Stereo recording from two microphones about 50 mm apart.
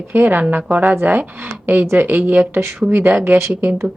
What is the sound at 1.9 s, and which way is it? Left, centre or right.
Speech, right.